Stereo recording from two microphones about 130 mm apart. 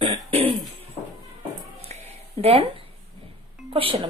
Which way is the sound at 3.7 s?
45° right (ahead or behind).